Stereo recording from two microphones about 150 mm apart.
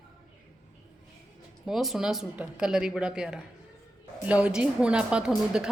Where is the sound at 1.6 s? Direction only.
Centre (ahead or behind).